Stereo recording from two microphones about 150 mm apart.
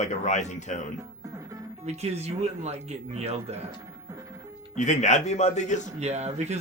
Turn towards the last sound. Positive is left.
turn(degrees=-50)  # may be behind; listen again after turning